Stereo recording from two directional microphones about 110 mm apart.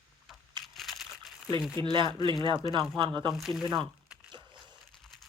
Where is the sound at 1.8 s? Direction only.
50° right (ahead or behind).